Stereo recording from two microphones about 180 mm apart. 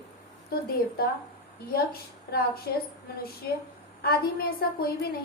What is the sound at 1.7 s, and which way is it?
A woman's voice, 55° left (ahead or behind).